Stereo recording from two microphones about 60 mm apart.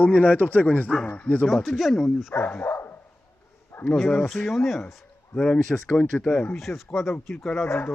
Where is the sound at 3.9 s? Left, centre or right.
Centre.